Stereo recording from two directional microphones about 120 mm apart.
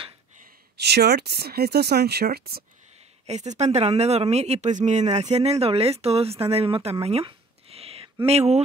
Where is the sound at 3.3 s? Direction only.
70° right (ahead or behind).